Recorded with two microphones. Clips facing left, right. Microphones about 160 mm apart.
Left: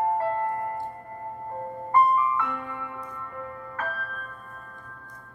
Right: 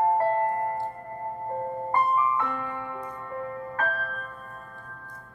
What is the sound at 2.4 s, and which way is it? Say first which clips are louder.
Music: right 1 dB; 35° right (ahead or behind).